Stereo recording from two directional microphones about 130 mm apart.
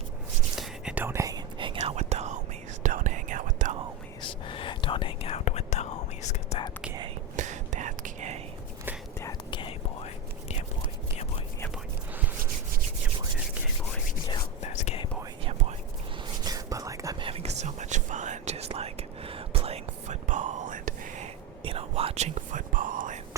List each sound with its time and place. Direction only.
0.5 s whispering: centre (ahead or behind)
0.9 s whispering: 20° right (ahead or behind)
1.5 s whispering: 40° right (ahead or behind)
1.8 s whispering: 60° right (ahead or behind)
2.8 s whispering: 75° right (ahead or behind)
4.2 s whispering: 40° left (ahead or behind); by 6.6 s 60° left (ahead or behind)
7.3 s whispering: 70° right (ahead or behind)
9.5 s whispering: 40° left (ahead or behind)
14.6 s whispering: 60° left (ahead or behind)
16.4 s whispering: 30° right (ahead or behind)
17.2 s whispering: 45° right (ahead or behind)
20.2 s whispering: 70° right (ahead or behind); by 21.2 s 90° right
21.6 s whispering: 45° right (ahead or behind); by 23.2 s 85° right